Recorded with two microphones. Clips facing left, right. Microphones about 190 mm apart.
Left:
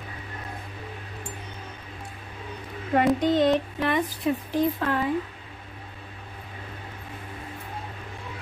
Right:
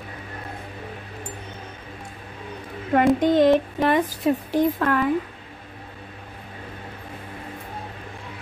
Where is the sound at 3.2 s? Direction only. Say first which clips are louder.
Right 4 dB; 45° right (ahead or behind).